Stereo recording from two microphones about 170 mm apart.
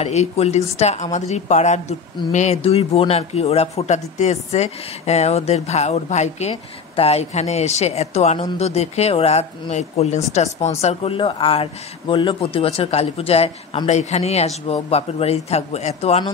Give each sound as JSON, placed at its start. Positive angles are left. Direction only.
{"t": 0.0, "sound": "speech", "side_deg": 40}